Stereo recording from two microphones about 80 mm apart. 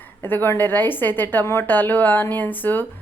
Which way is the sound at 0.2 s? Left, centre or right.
Left.